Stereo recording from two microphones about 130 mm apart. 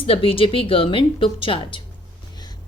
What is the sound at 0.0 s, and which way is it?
Speech, 45° left (ahead or behind).